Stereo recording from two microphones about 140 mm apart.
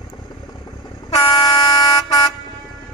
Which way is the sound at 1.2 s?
35° left (ahead or behind).